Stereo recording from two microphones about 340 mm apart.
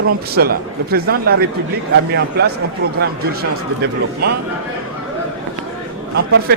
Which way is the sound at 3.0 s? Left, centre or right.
Right.